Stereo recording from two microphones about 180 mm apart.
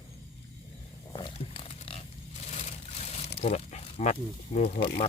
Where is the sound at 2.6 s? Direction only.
35° left (ahead or behind).